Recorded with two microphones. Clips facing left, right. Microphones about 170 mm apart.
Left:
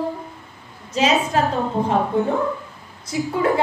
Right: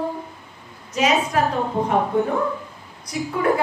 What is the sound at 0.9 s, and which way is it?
Speech, 30° left (ahead or behind).